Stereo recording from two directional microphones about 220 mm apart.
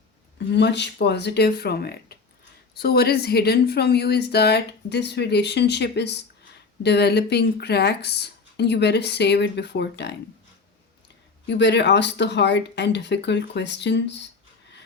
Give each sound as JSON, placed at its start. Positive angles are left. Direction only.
{"t": 0.3, "sound": "a woman's voice", "side_deg": 50}
{"t": 11.4, "sound": "a woman's voice", "side_deg": 50}